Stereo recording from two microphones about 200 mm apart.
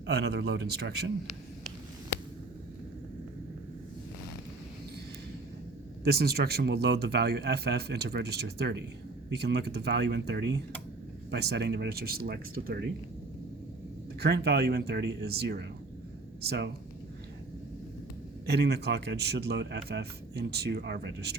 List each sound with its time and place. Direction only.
0.0 s a man's voice: 55° right (ahead or behind)
6.1 s a man's voice: 50° right (ahead or behind)
14.2 s a man's voice: 55° right (ahead or behind)
18.4 s a man's voice: 55° right (ahead or behind)